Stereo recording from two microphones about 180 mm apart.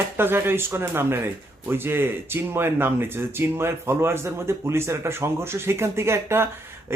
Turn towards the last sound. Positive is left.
turn(degrees=-15)  # may be behind; listen again after turning